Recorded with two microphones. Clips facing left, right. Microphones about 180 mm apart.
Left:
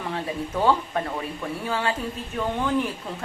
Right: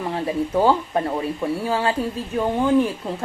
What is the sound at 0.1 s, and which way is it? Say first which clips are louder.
Speech: right 6 dB; 30° right (ahead or behind).